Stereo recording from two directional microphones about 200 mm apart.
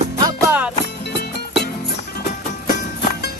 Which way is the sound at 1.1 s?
55° left (ahead or behind).